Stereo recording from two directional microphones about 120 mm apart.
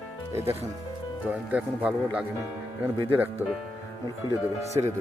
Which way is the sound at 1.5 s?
10° right (ahead or behind).